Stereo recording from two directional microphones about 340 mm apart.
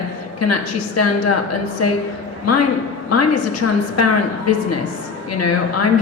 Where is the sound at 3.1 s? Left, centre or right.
Left.